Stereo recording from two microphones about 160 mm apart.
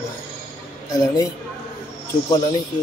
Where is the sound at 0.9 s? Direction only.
20° left (ahead or behind).